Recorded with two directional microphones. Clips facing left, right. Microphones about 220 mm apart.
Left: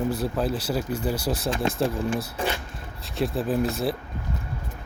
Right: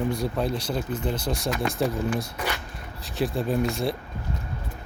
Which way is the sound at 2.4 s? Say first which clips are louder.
Left 3 dB; 30° left (ahead or behind).